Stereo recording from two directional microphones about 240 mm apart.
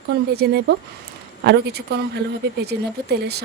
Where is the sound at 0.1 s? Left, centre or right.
Right.